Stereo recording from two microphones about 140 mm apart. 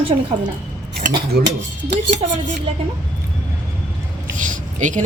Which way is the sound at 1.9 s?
60° right (ahead or behind).